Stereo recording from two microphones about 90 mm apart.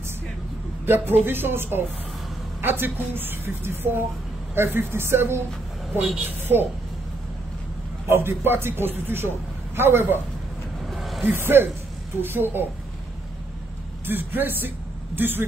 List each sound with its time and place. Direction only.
0.8 s a woman's voice: 25° right (ahead or behind)
8.1 s a woman's voice: 25° right (ahead or behind)
10.9 s music: centre (ahead or behind)
11.2 s a woman's voice: 25° right (ahead or behind)
14.0 s a woman's voice: 25° right (ahead or behind)